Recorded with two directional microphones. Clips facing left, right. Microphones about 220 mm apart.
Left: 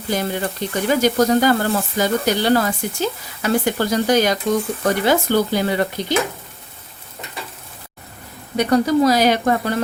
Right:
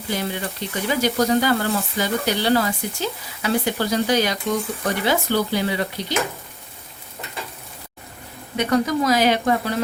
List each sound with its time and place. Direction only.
0.1 s speech: 45° left (ahead or behind)
8.5 s speech: 35° left (ahead or behind)